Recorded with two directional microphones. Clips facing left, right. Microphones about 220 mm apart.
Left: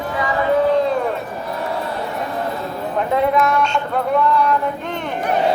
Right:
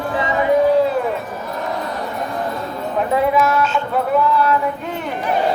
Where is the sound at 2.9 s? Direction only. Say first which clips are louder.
Right 1 dB; centre (ahead or behind).